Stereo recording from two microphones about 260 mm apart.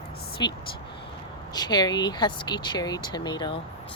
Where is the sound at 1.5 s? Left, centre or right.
Centre.